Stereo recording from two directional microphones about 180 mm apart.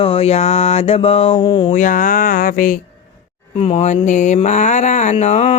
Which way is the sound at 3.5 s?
35° left (ahead or behind).